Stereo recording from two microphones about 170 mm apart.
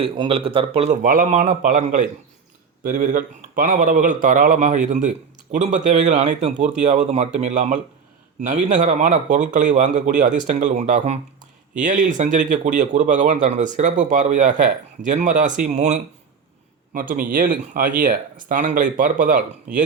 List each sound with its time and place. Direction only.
0.0 s a man's voice: 30° right (ahead or behind)
1.0 s speech: 50° right (ahead or behind)
16.9 s speech: 55° right (ahead or behind)